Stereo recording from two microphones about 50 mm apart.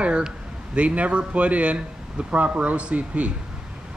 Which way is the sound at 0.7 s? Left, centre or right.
Right.